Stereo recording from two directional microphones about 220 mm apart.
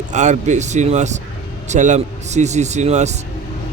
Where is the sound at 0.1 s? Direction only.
35° right (ahead or behind).